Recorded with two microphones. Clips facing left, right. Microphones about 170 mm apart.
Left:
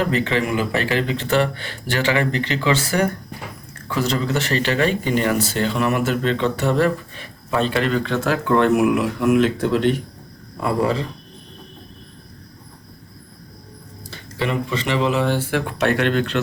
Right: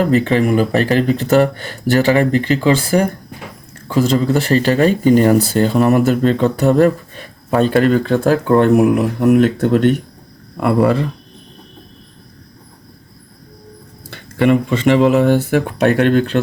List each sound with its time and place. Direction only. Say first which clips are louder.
0.0 s speech: right 7 dB; 40° right (ahead or behind)
10.6 s speech: right 6 dB; 65° right (ahead or behind)
14.1 s speech: right 11 dB; 55° right (ahead or behind)